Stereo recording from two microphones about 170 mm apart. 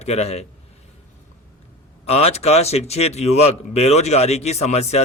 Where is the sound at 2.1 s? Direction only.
40° left (ahead or behind).